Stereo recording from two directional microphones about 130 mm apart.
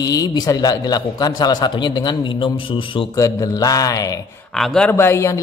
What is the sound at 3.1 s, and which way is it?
Speech, 25° left (ahead or behind).